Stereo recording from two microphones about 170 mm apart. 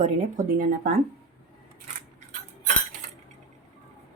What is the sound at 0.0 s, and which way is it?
Speech, 55° right (ahead or behind).